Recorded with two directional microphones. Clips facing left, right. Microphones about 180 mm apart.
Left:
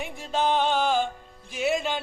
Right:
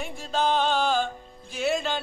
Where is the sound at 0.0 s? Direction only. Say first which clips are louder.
Even; 15° left (ahead or behind).